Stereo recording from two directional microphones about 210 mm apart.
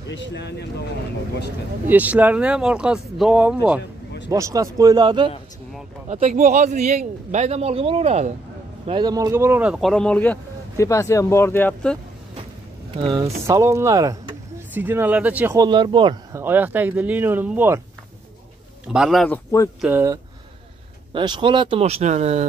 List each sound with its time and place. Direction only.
0.1 s speech: 55° left (ahead or behind)
1.9 s speech: 10° right (ahead or behind)
6.0 s speech: 35° right (ahead or behind); by 12.0 s 5° left (ahead or behind)
13.0 s speech: 20° right (ahead or behind)
18.9 s speech: centre (ahead or behind)
19.8 s speech: 10° right (ahead or behind)
21.1 s speech: 20° right (ahead or behind)